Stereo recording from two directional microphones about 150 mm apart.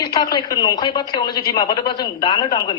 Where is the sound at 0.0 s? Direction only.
25° left (ahead or behind).